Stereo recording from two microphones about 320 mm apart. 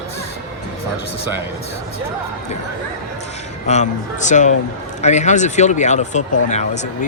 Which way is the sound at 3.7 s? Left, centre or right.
Left.